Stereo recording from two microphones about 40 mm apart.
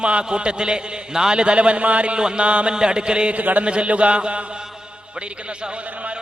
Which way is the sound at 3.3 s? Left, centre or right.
Right.